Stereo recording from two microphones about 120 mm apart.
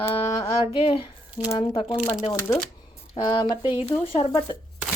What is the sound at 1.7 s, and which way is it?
Speech, 50° left (ahead or behind).